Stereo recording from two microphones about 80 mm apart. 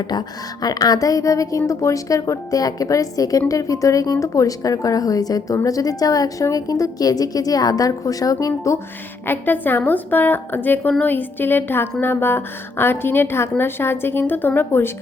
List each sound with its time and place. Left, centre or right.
0.1 s speech: left
9.2 s a woman's voice: left